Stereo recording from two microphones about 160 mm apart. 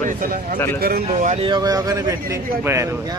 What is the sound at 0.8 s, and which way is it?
Speech, 70° right (ahead or behind).